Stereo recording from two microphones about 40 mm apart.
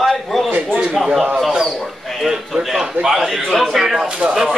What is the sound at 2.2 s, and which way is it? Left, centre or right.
A man's voice, centre.